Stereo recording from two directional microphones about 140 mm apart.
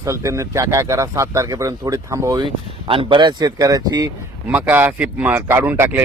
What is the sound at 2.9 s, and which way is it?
Speech, 40° right (ahead or behind).